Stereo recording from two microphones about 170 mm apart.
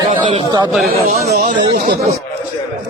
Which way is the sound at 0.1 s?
30° right (ahead or behind).